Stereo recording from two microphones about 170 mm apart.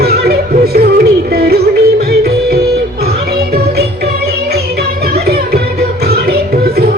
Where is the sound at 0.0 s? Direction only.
70° right (ahead or behind).